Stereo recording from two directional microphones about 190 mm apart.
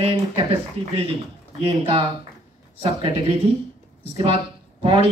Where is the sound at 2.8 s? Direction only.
25° right (ahead or behind).